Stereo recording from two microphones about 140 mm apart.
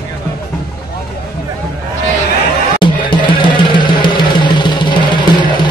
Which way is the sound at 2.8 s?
35° left (ahead or behind).